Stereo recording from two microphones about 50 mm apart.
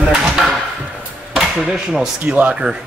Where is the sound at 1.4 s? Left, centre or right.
Centre.